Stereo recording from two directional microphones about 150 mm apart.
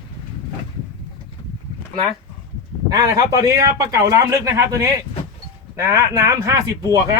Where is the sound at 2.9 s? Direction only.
25° right (ahead or behind).